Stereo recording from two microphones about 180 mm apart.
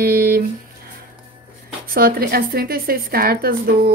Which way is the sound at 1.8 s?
55° right (ahead or behind).